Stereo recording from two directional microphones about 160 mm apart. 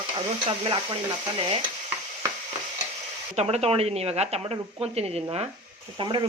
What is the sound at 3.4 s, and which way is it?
Speech, 40° right (ahead or behind).